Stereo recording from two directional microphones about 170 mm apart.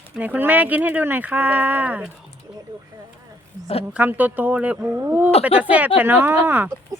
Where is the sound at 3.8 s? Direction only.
10° right (ahead or behind).